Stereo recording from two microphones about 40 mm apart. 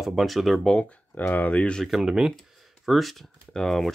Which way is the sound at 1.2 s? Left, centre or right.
Left.